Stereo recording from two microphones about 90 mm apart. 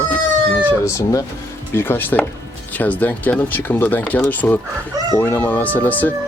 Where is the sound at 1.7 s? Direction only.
25° left (ahead or behind).